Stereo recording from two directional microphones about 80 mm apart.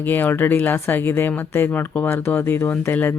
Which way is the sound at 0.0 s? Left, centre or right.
Left.